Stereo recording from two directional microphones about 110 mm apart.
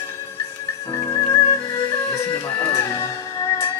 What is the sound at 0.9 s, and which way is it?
Music, 25° left (ahead or behind).